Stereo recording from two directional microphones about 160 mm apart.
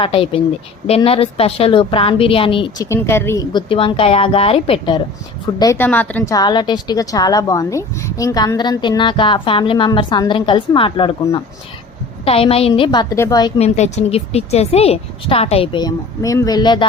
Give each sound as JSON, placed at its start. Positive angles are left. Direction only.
{"t": 0.0, "sound": "speech", "side_deg": 35}
{"t": 2.9, "sound": "a woman's voice", "side_deg": 15}
{"t": 3.5, "sound": "speech", "side_deg": 35}
{"t": 5.5, "sound": "a woman's voice", "side_deg": 15}
{"t": 6.3, "sound": "a woman's voice", "side_deg": 25}
{"t": 12.2, "sound": "a woman's voice", "side_deg": 35}
{"t": 13.6, "sound": "speech", "side_deg": 45}